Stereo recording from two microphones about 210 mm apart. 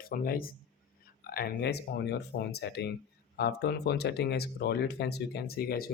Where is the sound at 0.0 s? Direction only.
45° left (ahead or behind).